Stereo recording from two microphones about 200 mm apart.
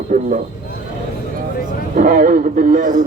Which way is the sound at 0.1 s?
45° right (ahead or behind).